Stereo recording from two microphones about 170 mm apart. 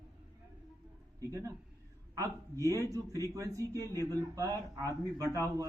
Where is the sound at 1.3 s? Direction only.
20° right (ahead or behind).